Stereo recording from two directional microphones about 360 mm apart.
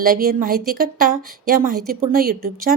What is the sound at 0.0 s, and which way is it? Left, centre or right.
A woman's voice, right.